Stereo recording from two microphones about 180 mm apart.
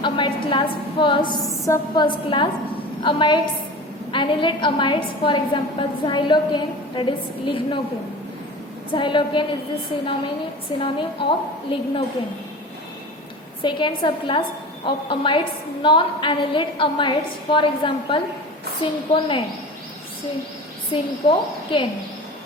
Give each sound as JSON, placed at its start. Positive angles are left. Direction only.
{"t": 0.0, "sound": "a woman's voice", "side_deg": 25}
{"t": 8.9, "sound": "a woman's voice", "side_deg": 25}
{"t": 10.8, "sound": "a woman's voice", "side_deg": 30}
{"t": 13.6, "sound": "a woman's voice", "side_deg": 25}
{"t": 20.9, "sound": "a woman's voice", "side_deg": 30}